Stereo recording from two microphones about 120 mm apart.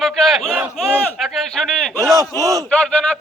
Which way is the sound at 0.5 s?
15° right (ahead or behind).